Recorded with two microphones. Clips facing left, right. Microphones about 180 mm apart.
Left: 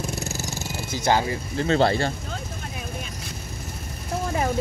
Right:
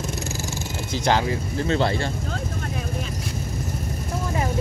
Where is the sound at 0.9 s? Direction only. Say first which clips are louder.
Even; 10° left (ahead or behind).